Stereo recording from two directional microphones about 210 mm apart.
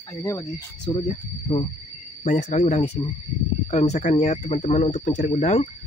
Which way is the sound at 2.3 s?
35° left (ahead or behind).